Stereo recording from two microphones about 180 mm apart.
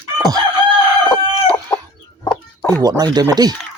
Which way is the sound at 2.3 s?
10° left (ahead or behind).